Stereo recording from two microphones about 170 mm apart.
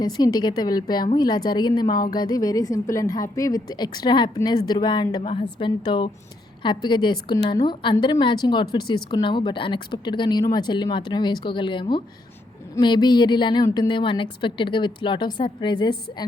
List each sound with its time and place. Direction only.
0.0 s a woman's voice: 25° left (ahead or behind)